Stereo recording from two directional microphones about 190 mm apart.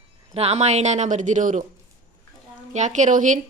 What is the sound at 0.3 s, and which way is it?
A woman's voice, 35° right (ahead or behind).